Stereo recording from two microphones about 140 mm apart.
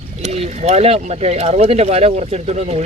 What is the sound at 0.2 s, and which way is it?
Speech, 50° right (ahead or behind).